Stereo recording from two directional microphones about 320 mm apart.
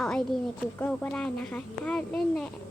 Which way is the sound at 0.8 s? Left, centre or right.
Centre.